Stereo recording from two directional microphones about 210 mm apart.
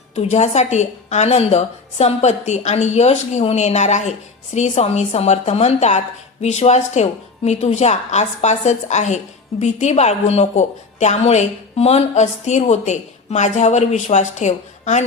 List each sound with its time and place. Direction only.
0.2 s a woman's voice: 30° left (ahead or behind)